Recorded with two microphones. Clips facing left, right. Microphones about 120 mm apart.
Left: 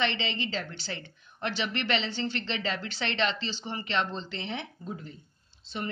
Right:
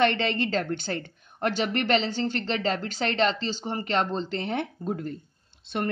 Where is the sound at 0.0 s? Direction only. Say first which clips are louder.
Right 7 dB; 50° right (ahead or behind).